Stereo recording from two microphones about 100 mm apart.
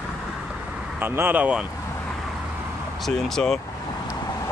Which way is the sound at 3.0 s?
5° left (ahead or behind).